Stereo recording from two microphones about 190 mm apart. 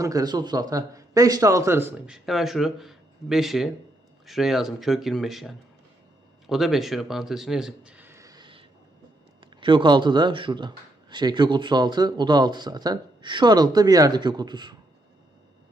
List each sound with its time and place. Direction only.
0.0 s a man's voice: 20° right (ahead or behind)